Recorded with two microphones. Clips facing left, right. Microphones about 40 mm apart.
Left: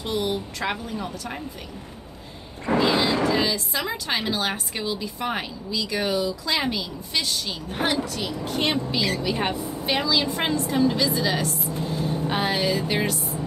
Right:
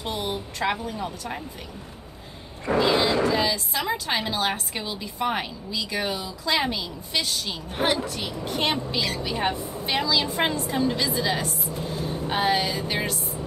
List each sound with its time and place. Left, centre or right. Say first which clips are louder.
0.0 s a woman's voice: left 3 dB; centre
0.7 s a woman's voice: right 2 dB; centre
3.0 s a woman's voice: even; centre
8.5 s a woman's voice: left 1 dB; centre